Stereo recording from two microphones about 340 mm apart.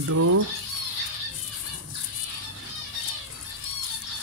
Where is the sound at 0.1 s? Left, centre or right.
Right.